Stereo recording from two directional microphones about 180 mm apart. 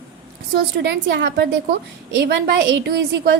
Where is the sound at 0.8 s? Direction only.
80° right.